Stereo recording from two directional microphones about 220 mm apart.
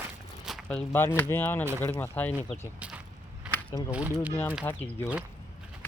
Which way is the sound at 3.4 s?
5° right (ahead or behind).